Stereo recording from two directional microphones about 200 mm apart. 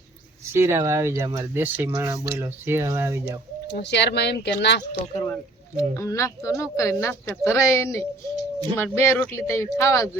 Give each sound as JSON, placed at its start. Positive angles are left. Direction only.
{"t": 0.5, "sound": "speech", "side_deg": -15}
{"t": 3.7, "sound": "speech", "side_deg": 55}
{"t": 5.2, "sound": "speech", "side_deg": 15}